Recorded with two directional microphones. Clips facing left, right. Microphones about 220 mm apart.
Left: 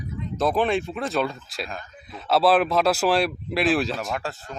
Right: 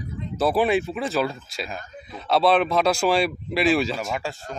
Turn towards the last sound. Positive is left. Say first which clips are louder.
# right 1 dB
turn(degrees=0)  # may be behind; listen again after turning